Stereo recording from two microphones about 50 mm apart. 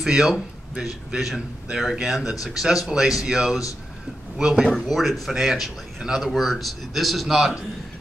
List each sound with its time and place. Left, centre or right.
0.0 s a man's voice: centre
4.7 s a man's voice: centre
6.3 s speech: centre